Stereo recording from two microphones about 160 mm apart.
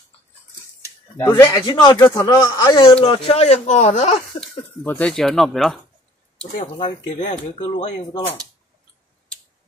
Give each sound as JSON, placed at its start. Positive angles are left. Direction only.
{"t": 1.1, "sound": "speech", "side_deg": 15}
{"t": 1.5, "sound": "a man's voice", "side_deg": 25}
{"t": 4.4, "sound": "speech", "side_deg": 10}
{"t": 6.5, "sound": "speech", "side_deg": 50}
{"t": 7.5, "sound": "a man's voice", "side_deg": 30}